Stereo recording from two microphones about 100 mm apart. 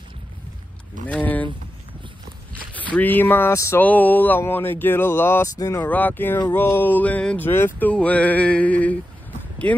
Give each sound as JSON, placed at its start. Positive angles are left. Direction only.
{"t": 1.0, "sound": "vehicle", "side_deg": 15}
{"t": 2.9, "sound": "speech", "side_deg": 15}
{"t": 3.8, "sound": "speech", "side_deg": 15}
{"t": 7.9, "sound": "music", "side_deg": 15}